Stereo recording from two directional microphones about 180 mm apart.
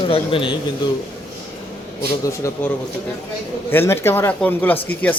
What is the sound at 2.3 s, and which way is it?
Speech, 15° left (ahead or behind).